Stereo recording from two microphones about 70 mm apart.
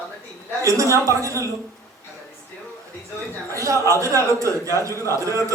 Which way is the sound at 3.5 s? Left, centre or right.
Right.